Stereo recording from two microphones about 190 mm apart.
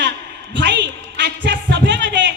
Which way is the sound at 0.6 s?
65° right (ahead or behind).